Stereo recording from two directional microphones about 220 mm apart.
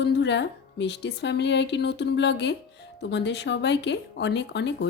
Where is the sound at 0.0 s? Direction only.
50° left (ahead or behind).